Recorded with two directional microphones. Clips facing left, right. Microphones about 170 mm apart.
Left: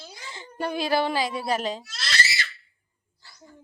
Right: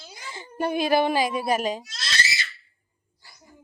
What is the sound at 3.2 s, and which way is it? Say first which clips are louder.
Dog: left 2 dB; 15° right (ahead or behind).